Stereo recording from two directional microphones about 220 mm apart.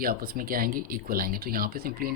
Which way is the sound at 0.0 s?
40° right (ahead or behind).